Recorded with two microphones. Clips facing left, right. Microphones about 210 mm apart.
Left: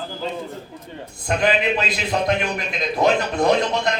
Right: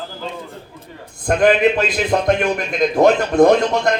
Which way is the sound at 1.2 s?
50° right (ahead or behind).